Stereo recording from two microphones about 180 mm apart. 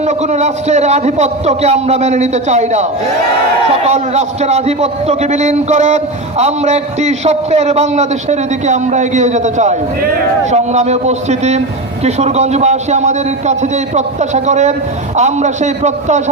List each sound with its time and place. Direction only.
0.0 s a man's voice: 40° right (ahead or behind)
3.8 s a man's voice: 35° right (ahead or behind)